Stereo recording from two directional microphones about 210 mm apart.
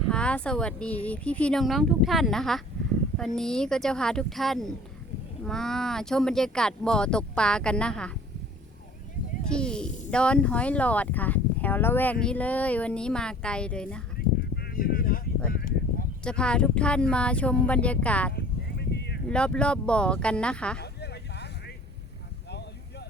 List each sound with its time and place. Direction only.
0.1 s speech: 5° left (ahead or behind)
9.5 s speech: 5° left (ahead or behind)
14.2 s honk: 45° left (ahead or behind)
15.5 s a sound: 45° left (ahead or behind)
16.2 s speech: 5° left (ahead or behind)
18.3 s a sound: 50° left (ahead or behind)
19.3 s speech: 5° left (ahead or behind)
20.7 s vehicle: 50° left (ahead or behind)